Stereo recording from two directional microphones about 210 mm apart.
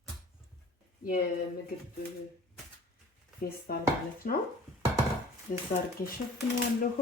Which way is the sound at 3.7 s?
45° left (ahead or behind).